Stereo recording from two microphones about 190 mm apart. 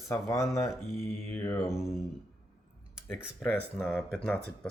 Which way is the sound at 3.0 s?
10° left (ahead or behind).